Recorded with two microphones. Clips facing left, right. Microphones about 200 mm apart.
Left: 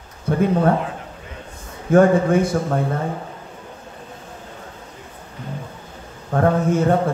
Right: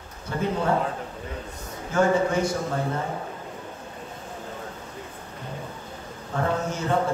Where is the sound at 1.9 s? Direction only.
55° left (ahead or behind).